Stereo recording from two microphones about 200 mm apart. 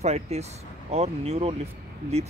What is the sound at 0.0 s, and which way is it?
Speech, 35° right (ahead or behind).